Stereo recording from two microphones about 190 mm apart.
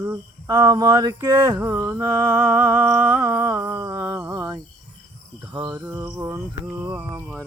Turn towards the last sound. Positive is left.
turn(degrees=-10)  # may be behind; listen again after turning